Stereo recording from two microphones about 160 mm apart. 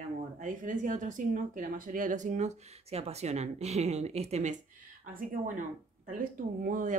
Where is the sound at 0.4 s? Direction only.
55° right (ahead or behind).